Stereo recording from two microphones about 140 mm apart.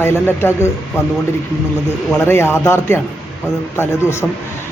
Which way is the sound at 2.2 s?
15° left (ahead or behind).